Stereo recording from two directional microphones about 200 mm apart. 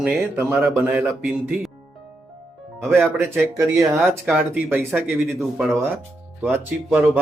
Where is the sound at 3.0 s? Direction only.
5° right (ahead or behind).